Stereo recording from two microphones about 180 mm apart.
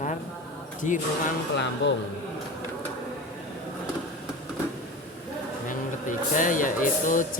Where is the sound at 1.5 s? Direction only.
75° left (ahead or behind).